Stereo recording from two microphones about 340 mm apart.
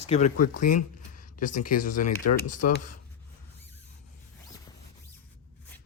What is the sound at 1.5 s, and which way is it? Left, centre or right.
Speech, left.